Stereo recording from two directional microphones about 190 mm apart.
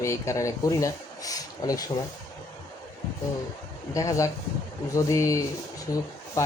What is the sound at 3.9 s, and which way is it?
Speech, 15° left (ahead or behind).